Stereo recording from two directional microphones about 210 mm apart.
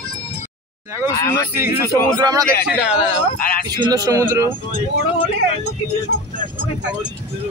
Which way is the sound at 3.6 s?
20° right (ahead or behind).